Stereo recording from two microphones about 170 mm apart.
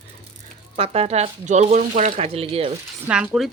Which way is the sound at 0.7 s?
35° right (ahead or behind).